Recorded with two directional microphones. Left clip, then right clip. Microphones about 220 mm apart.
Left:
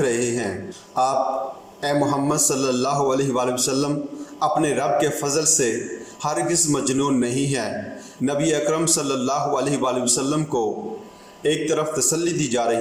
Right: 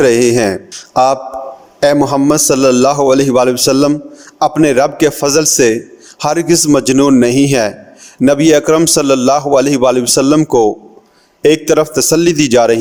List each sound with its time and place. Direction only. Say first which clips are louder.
0.0 s a man's voice: right 13 dB; 50° right (ahead or behind)
1.8 s a man's voice: right 11 dB; 50° right (ahead or behind)